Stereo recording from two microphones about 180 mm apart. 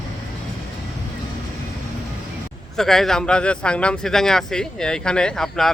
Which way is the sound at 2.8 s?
Centre (ahead or behind).